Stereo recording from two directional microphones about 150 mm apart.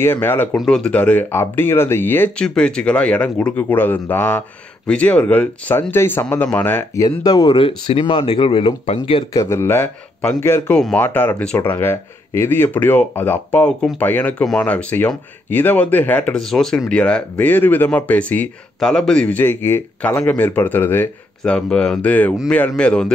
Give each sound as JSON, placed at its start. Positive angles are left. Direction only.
{"t": 0.0, "sound": "speech", "side_deg": 15}
{"t": 0.6, "sound": "speech", "side_deg": 5}
{"t": 7.1, "sound": "speech", "side_deg": 30}
{"t": 9.3, "sound": "speech", "side_deg": 20}